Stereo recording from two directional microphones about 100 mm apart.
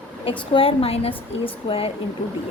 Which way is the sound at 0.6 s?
70° left (ahead or behind).